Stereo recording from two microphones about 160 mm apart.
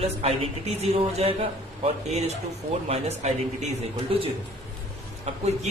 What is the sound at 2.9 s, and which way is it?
Speech, 45° right (ahead or behind).